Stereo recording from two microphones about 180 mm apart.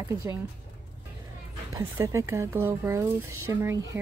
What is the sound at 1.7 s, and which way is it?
Speech, 15° right (ahead or behind).